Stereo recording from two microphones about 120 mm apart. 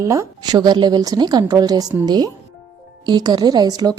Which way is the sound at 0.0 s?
25° right (ahead or behind).